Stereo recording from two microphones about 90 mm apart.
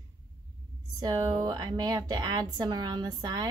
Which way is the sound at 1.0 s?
50° right (ahead or behind).